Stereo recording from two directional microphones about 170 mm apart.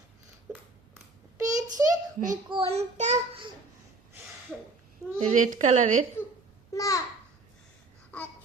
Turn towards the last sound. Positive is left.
turn(degrees=20)  # may be behind; listen again after turning